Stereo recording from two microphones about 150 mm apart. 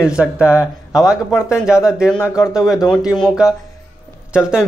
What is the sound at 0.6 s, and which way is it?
Speech, 25° left (ahead or behind).